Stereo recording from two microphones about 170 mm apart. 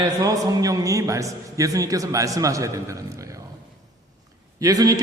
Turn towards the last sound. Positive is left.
turn(degrees=-20)  # may be behind; listen again after turning